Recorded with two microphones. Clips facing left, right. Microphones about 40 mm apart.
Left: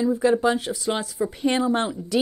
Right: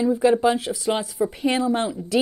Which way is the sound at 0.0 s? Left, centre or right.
Right.